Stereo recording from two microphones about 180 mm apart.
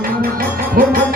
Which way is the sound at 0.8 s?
50° right (ahead or behind).